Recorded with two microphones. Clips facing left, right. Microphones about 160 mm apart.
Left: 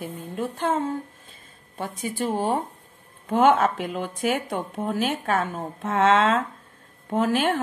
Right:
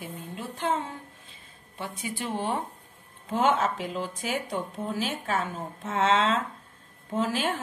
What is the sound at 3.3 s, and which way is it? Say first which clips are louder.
Speech: left 6 dB; 55° left (ahead or behind).